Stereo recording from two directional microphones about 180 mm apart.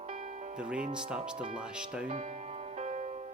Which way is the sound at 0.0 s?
40° right (ahead or behind).